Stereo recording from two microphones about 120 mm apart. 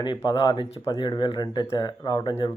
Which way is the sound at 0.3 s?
45° left (ahead or behind).